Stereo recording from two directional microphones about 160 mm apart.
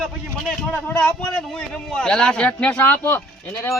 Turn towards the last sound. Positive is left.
turn(degrees=15)  # may be behind; listen again after turning